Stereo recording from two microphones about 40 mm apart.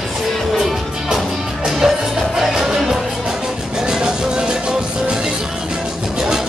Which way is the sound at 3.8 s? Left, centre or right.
Centre.